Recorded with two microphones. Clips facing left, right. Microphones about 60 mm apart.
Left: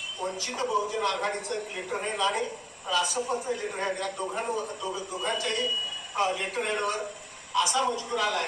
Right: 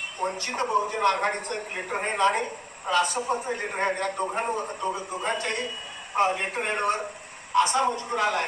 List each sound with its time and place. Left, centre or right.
0.2 s a man's voice: right